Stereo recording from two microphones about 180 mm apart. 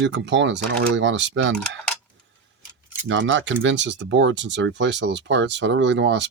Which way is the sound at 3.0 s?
90° right.